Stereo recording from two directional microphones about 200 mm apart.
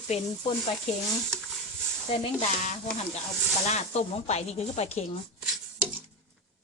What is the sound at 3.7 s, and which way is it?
Speech, 35° left (ahead or behind).